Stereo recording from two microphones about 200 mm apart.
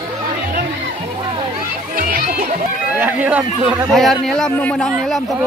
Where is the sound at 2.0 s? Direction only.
45° right (ahead or behind).